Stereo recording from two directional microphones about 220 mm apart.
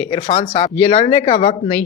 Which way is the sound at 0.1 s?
25° left (ahead or behind).